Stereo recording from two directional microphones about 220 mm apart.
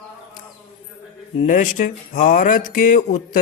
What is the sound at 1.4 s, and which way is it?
Speech, 35° left (ahead or behind).